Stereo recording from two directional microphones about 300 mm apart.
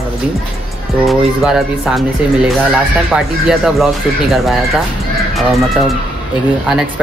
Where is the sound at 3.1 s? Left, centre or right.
Centre.